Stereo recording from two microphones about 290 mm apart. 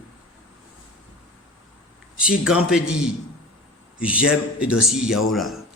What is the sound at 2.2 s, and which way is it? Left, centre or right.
A man's voice, centre.